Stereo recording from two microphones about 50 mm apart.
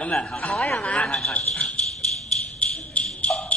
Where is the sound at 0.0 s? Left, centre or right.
Centre.